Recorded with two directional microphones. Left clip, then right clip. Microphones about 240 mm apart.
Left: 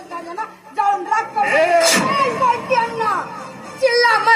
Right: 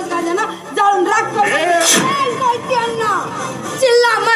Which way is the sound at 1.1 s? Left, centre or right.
Right.